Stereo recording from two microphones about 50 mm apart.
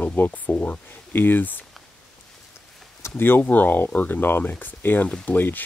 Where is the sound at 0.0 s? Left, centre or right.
Left.